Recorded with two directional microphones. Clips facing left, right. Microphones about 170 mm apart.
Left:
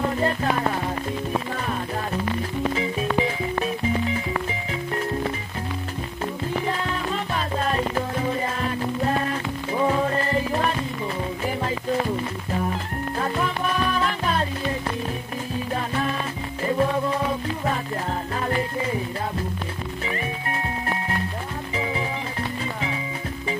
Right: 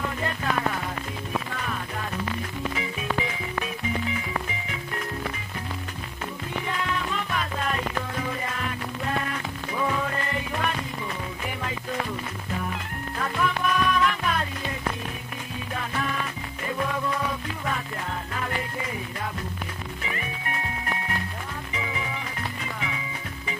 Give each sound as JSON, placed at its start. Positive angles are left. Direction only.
{"t": 0.0, "sound": "music", "side_deg": 35}
{"t": 6.6, "sound": "music", "side_deg": 35}
{"t": 13.2, "sound": "music", "side_deg": 30}
{"t": 20.1, "sound": "music", "side_deg": 35}